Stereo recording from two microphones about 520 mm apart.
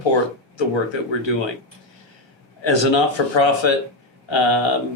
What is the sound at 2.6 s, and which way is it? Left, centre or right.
Speech, left.